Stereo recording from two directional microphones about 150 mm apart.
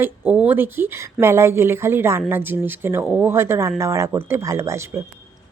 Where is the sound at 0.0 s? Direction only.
10° right (ahead or behind).